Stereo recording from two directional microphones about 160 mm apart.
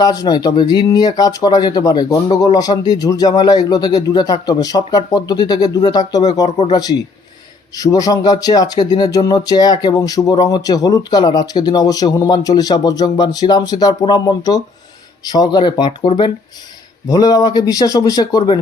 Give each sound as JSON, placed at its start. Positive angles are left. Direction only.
{"t": 0.0, "sound": "speech", "side_deg": 25}